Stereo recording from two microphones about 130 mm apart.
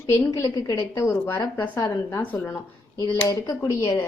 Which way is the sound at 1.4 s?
30° left (ahead or behind).